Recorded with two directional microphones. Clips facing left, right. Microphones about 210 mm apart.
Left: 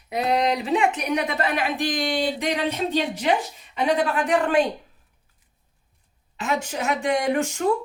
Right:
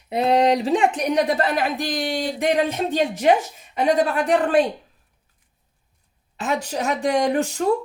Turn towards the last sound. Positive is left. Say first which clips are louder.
# right 2 dB
turn(degrees=-35)  # may be behind; listen again after turning